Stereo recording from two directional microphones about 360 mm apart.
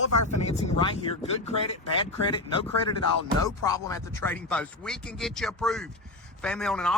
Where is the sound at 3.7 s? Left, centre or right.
Centre.